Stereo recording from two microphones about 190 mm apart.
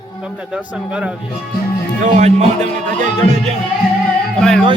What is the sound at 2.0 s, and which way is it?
Speech, 35° right (ahead or behind).